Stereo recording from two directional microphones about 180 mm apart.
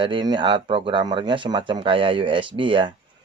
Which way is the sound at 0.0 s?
25° right (ahead or behind).